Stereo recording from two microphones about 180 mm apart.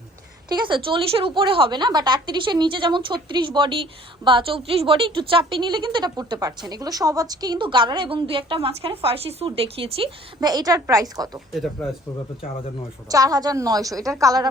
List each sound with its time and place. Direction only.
0.4 s a woman's voice: 25° right (ahead or behind)
11.6 s speech: 5° left (ahead or behind)
13.1 s a woman's voice: 20° right (ahead or behind)